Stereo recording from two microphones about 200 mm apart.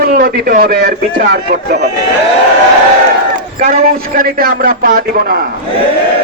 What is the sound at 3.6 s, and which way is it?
A man's voice, 45° right (ahead or behind).